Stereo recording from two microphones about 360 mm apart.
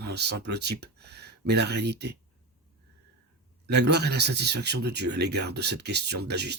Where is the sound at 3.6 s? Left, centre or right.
Right.